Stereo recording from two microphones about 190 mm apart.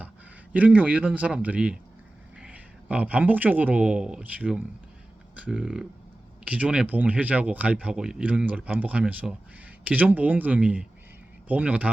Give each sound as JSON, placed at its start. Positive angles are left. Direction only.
{"t": 0.5, "sound": "speech", "side_deg": -10}